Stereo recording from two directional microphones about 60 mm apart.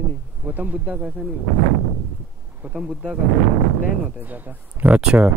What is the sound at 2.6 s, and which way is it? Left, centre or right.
Speech, right.